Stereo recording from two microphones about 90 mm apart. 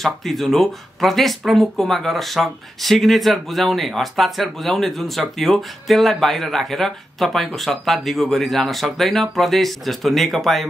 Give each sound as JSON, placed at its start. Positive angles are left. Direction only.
{"t": 0.0, "sound": "speech", "side_deg": 0}